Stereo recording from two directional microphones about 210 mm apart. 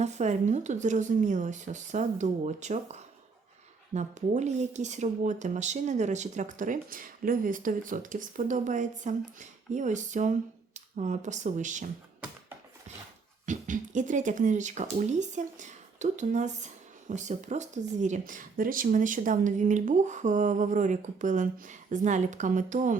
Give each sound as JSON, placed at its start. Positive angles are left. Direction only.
{"t": 0.0, "sound": "speech", "side_deg": -35}
{"t": 13.4, "sound": "speech", "side_deg": -35}